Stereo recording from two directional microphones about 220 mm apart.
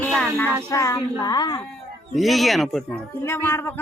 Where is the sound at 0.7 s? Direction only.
15° left (ahead or behind).